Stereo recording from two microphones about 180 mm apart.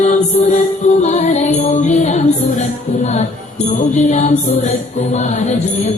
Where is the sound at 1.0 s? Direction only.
40° left (ahead or behind).